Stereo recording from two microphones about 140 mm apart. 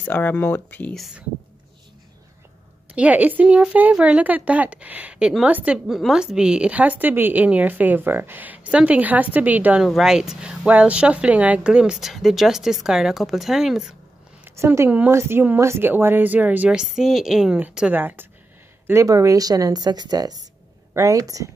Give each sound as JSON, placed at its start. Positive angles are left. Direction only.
{"t": 0.0, "sound": "speech", "side_deg": 10}
{"t": 0.9, "sound": "speech", "side_deg": 0}
{"t": 2.9, "sound": "a woman's voice", "side_deg": -10}
{"t": 14.4, "sound": "a woman's voice", "side_deg": -15}